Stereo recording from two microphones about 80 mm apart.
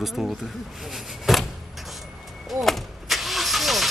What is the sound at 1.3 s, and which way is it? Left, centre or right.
Vehicle, centre.